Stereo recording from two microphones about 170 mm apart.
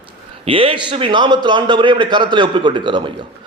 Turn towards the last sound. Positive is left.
turn(degrees=-30)  # may be behind; listen again after turning